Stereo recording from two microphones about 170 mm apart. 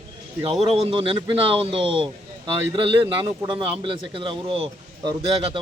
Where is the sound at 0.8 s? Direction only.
35° right (ahead or behind).